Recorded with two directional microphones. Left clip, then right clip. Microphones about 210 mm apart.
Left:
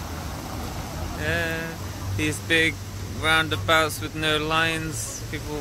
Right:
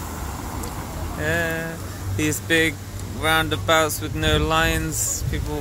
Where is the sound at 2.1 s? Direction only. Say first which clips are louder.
Right 2 dB; 20° right (ahead or behind).